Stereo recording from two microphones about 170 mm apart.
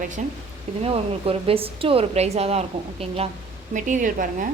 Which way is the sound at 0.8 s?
35° right (ahead or behind).